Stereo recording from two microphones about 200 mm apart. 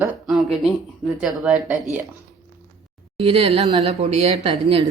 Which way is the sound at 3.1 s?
30° right (ahead or behind).